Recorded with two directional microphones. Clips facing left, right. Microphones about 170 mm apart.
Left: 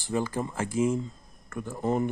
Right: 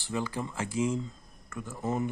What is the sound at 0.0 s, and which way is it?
Speech, 45° left (ahead or behind).